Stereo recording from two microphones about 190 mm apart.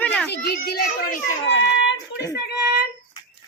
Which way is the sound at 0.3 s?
55° left (ahead or behind).